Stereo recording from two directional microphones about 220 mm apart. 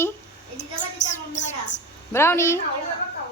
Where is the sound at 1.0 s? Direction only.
35° left (ahead or behind).